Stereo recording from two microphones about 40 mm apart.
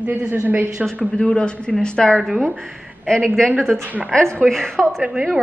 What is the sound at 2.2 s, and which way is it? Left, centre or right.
Speech, centre.